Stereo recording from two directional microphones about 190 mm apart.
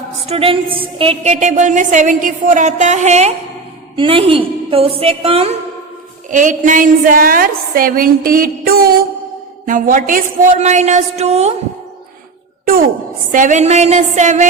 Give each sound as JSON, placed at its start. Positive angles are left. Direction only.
{"t": 0.3, "sound": "a woman's voice", "side_deg": -30}
{"t": 6.3, "sound": "a woman's voice", "side_deg": -40}
{"t": 13.3, "sound": "a woman's voice", "side_deg": -40}